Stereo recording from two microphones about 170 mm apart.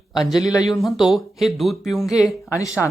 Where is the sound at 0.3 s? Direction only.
20° left (ahead or behind).